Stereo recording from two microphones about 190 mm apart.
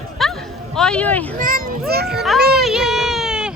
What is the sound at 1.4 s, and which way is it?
A child's voice, 45° right (ahead or behind).